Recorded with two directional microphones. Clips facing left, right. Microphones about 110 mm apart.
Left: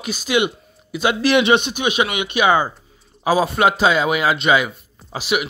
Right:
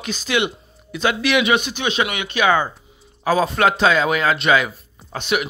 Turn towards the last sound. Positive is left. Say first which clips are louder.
# even
turn(degrees=5)  # may be behind; listen again after turning